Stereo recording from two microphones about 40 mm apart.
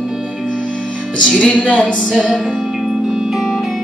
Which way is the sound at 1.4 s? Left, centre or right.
Left.